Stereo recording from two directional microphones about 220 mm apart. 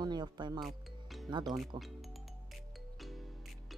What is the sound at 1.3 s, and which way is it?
Speech, 20° right (ahead or behind).